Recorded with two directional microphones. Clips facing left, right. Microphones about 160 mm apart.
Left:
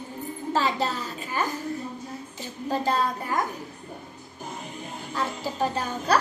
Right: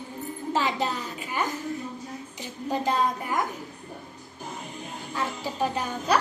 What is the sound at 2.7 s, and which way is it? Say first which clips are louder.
Speech: even; 15° right (ahead or behind).